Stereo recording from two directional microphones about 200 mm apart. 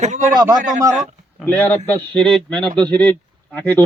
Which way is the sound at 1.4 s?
5° left (ahead or behind).